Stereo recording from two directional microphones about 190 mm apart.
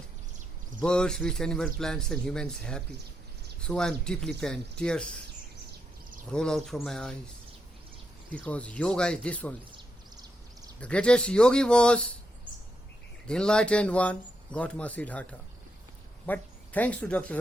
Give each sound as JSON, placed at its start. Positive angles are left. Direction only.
{"t": 0.8, "sound": "a man's voice", "side_deg": 5}
{"t": 6.3, "sound": "a man's voice", "side_deg": 5}
{"t": 8.4, "sound": "speech", "side_deg": 5}
{"t": 9.7, "sound": "a sound", "side_deg": -20}
{"t": 10.8, "sound": "a man's voice", "side_deg": 5}
{"t": 13.2, "sound": "speech", "side_deg": 5}